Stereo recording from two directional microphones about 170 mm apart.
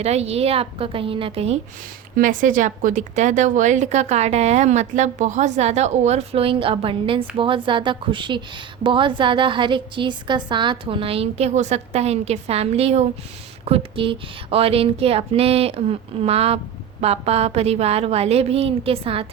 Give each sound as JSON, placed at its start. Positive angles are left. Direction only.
{"t": 0.0, "sound": "speech", "side_deg": -40}
{"t": 2.1, "sound": "a woman's voice", "side_deg": -50}